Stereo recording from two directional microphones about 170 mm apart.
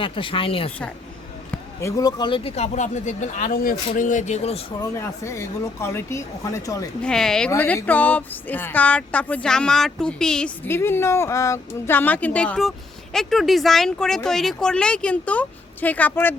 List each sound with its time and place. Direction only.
0.0 s speech: 30° left (ahead or behind)
1.5 s speech: 20° left (ahead or behind); by 4.6 s 40° left (ahead or behind)
4.8 s speech: 15° left (ahead or behind)
7.0 s speech: 5° left (ahead or behind)